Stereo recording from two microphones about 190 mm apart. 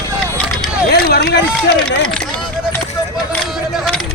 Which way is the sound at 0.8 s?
55° left (ahead or behind).